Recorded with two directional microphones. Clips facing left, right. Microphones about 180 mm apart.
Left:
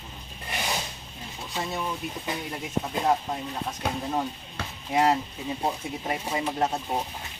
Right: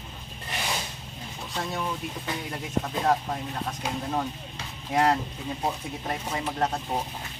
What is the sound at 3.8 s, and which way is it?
Speech, 55° left (ahead or behind).